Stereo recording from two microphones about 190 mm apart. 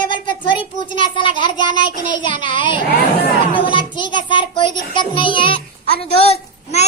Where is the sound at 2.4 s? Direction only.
25° left (ahead or behind).